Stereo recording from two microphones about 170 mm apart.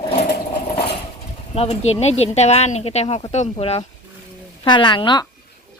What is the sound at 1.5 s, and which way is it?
Speech, 35° left (ahead or behind).